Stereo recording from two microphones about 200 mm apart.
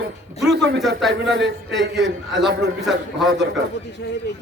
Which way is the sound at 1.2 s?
60° right (ahead or behind).